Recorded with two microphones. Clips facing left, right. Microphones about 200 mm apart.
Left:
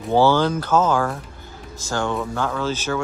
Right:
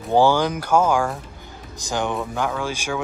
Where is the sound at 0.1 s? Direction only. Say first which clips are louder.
Left 1 dB; 15° right (ahead or behind).